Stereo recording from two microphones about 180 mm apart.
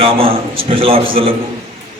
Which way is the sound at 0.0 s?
30° right (ahead or behind).